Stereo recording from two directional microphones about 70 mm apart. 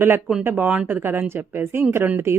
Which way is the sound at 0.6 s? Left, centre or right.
Right.